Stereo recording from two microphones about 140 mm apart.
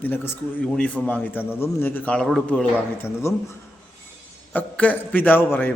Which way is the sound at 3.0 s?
20° left (ahead or behind).